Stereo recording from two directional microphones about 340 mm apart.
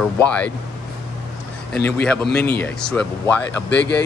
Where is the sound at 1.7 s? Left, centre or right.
Centre.